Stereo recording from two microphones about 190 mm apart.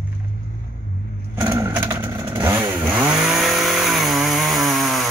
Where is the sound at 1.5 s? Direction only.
15° right (ahead or behind).